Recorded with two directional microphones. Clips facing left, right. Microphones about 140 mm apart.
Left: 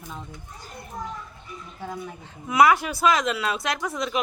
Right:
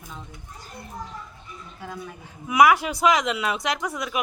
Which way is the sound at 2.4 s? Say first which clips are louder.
Right 1 dB; 10° right (ahead or behind).